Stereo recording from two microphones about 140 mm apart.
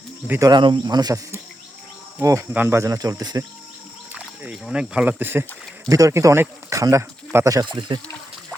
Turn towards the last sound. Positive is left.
turn(degrees=-25)  # may be behind; listen again after turning